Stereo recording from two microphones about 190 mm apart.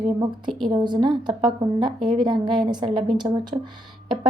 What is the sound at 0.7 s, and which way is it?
A woman's voice, 25° right (ahead or behind).